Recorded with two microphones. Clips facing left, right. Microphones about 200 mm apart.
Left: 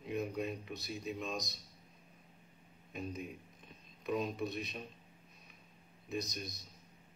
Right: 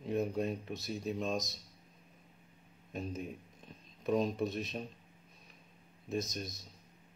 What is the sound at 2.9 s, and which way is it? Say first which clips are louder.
Speech: right 2 dB; 40° right (ahead or behind).